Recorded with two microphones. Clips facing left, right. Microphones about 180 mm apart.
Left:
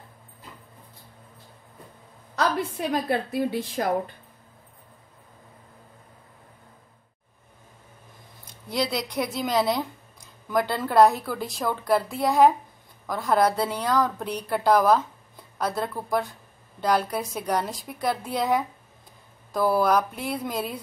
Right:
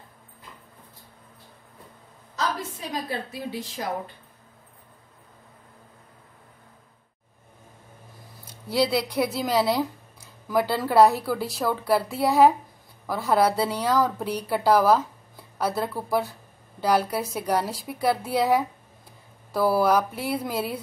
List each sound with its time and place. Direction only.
2.9 s a woman's voice: 55° left (ahead or behind)
8.7 s a woman's voice: 5° right (ahead or behind)